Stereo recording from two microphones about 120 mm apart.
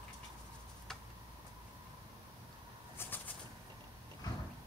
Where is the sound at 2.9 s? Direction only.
15° left (ahead or behind).